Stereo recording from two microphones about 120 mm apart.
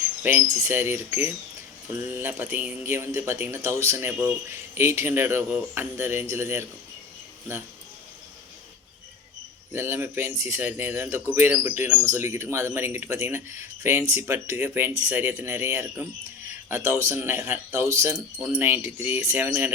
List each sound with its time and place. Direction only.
0.0 s speech: 15° right (ahead or behind)
9.7 s speech: 20° right (ahead or behind)